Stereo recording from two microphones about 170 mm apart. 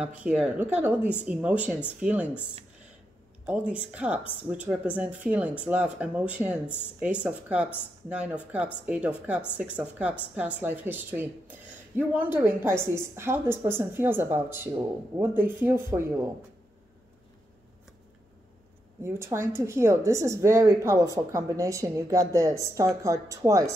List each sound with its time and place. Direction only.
0.0 s speech: 5° right (ahead or behind)
3.4 s speech: 5° right (ahead or behind)
19.0 s speech: 15° right (ahead or behind)